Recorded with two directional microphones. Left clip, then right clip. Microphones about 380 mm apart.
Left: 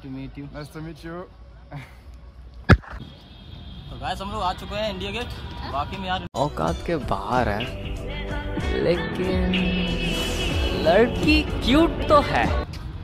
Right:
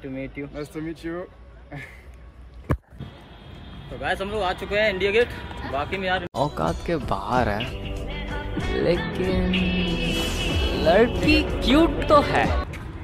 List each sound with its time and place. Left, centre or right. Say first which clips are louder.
0.7 s speech: right 6 dB; centre
4.1 s speech: right 2 dB; centre
6.3 s speech: even; centre